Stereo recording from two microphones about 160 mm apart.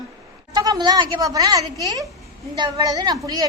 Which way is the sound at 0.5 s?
25° right (ahead or behind).